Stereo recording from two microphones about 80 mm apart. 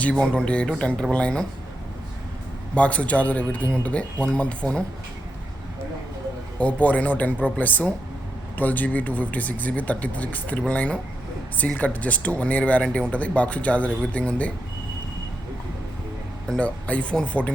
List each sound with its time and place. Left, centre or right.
0.0 s speech: centre
2.7 s speech: centre
6.6 s speech: centre
16.5 s speech: centre